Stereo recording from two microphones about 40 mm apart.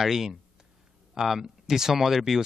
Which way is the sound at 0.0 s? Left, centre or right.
Centre.